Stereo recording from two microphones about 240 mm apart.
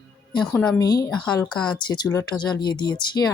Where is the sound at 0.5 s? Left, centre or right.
Centre.